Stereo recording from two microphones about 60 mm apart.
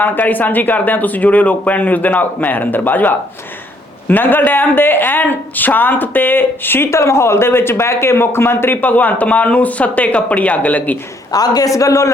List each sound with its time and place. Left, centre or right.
0.0 s speech: left
6.9 s speech: left
11.3 s a man's voice: left